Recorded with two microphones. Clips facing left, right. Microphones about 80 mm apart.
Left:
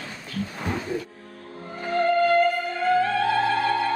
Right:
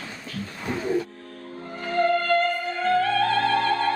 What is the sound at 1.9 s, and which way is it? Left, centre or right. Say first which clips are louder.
Music: left 1 dB; centre.